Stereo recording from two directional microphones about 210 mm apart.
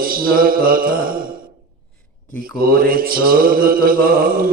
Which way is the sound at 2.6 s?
45° right (ahead or behind).